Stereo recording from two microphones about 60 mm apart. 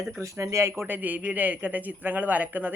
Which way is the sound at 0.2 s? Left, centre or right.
Right.